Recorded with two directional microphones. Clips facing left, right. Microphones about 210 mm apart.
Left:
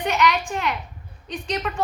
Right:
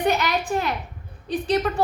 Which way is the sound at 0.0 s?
35° right (ahead or behind).